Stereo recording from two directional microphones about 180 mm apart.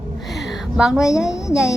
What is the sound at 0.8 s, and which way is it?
Speech, 5° right (ahead or behind).